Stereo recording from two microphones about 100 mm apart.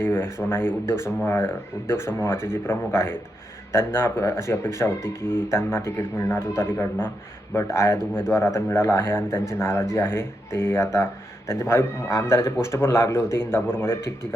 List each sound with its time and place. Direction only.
0.0 s speech: 25° left (ahead or behind)